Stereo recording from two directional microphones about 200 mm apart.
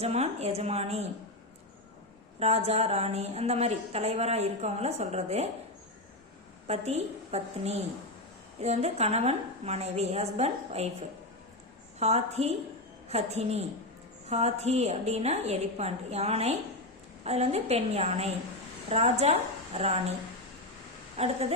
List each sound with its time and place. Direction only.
0.0 s a woman's voice: 30° right (ahead or behind)
2.4 s a woman's voice: 30° right (ahead or behind)
6.7 s a woman's voice: 35° right (ahead or behind)
11.9 s a woman's voice: 30° right (ahead or behind)
21.2 s a woman's voice: 30° right (ahead or behind)